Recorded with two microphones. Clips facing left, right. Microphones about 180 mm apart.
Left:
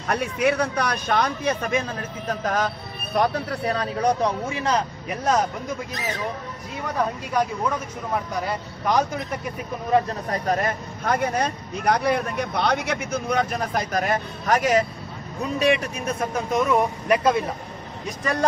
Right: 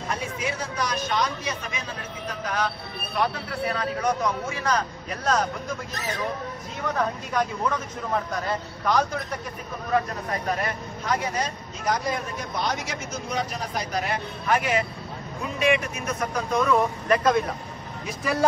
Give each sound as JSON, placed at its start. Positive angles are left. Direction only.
{"t": 0.1, "sound": "a man's voice", "side_deg": 65}
{"t": 4.6, "sound": "speech", "side_deg": 20}
{"t": 8.5, "sound": "a man's voice", "side_deg": 15}
{"t": 10.3, "sound": "speech", "side_deg": 45}
{"t": 15.6, "sound": "speech", "side_deg": 30}
{"t": 17.2, "sound": "a man's voice", "side_deg": 5}
{"t": 18.0, "sound": "speech", "side_deg": -5}